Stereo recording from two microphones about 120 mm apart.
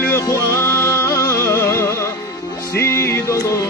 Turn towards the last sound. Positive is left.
turn(degrees=25)  # may be behind; listen again after turning